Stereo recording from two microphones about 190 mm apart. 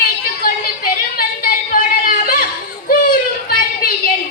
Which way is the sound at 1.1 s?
50° left (ahead or behind).